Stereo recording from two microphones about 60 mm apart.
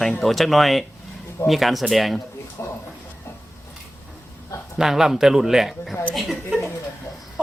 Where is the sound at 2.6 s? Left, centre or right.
Left.